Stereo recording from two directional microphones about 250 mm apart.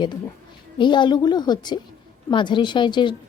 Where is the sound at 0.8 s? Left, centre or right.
Centre.